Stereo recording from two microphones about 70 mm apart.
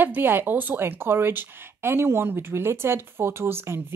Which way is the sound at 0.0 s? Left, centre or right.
Right.